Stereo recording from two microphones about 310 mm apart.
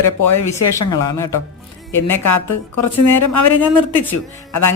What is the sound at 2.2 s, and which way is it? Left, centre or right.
Speech, left.